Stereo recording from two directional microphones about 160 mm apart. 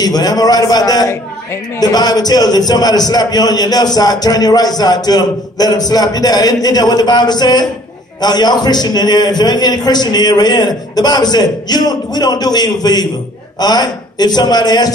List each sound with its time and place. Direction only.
0.0 s a man's voice: 25° left (ahead or behind)